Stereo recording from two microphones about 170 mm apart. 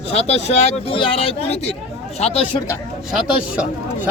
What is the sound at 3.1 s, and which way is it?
Speech, 5° right (ahead or behind).